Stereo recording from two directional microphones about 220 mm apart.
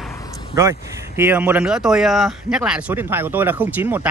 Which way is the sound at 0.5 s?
10° right (ahead or behind).